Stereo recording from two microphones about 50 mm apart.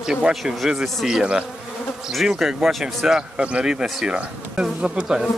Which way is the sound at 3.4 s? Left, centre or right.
Right.